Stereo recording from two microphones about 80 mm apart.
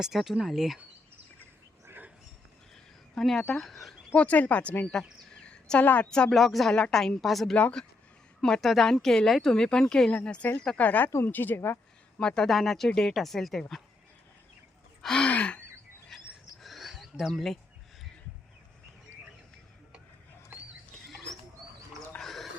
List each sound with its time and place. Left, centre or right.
0.0 s speech: centre
3.2 s speech: centre
4.1 s speech: centre
5.4 s a sound: centre
6.1 s speech: centre
7.5 s speech: centre; by 11.8 s left
12.2 s speech: centre
15.0 s speech: centre
16.6 s a sound: centre
22.2 s a sound: centre